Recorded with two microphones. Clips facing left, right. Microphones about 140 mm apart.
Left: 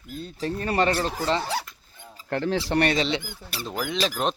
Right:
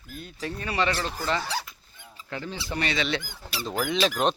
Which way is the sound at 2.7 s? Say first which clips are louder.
Left 3 dB; 60° left (ahead or behind).